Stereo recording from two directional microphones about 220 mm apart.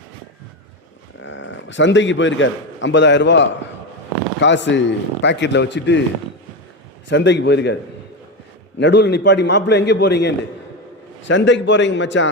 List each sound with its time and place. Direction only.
1.2 s a man's voice: 55° left (ahead or behind)
7.1 s a man's voice: 55° left (ahead or behind)
8.8 s a man's voice: 50° left (ahead or behind)